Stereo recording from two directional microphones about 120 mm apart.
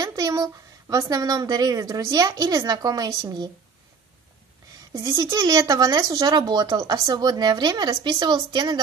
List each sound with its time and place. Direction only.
0.0 s speech: 30° right (ahead or behind)
4.9 s speech: 30° right (ahead or behind)